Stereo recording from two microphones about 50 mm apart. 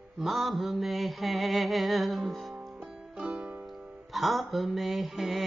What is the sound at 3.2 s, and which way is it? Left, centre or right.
Music, centre.